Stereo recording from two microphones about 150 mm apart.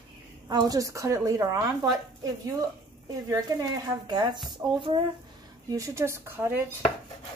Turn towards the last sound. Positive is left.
turn(degrees=-10)  # may be behind; listen again after turning